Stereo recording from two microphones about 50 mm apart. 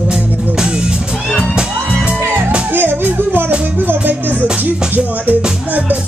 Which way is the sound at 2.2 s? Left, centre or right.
Right.